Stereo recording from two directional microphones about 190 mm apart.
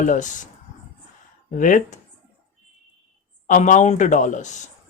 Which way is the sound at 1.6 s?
40° left (ahead or behind).